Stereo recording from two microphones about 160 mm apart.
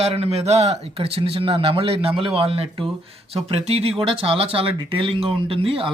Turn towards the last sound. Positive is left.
turn(degrees=-35)  # may be behind; listen again after turning